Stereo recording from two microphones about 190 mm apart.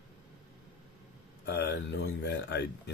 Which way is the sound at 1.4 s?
55° left (ahead or behind).